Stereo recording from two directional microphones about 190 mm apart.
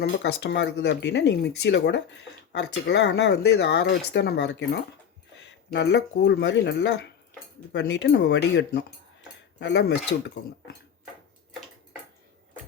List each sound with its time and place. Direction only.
0.0 s speech: 65° left (ahead or behind)